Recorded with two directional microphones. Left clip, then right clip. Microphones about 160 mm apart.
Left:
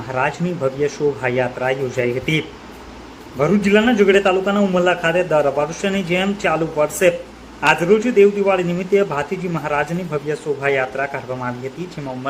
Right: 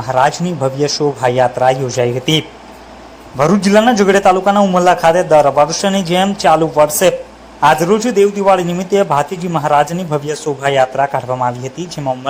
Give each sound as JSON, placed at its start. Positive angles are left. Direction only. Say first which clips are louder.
{"t": 0.1, "sound": "a man's voice", "louder": "right 8 dB", "side_deg": -25}